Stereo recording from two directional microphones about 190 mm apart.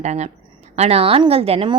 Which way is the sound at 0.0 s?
35° right (ahead or behind).